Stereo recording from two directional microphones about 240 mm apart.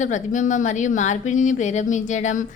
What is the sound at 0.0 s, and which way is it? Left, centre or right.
A woman's voice, left.